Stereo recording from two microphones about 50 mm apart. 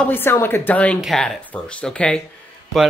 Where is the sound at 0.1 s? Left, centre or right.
Left.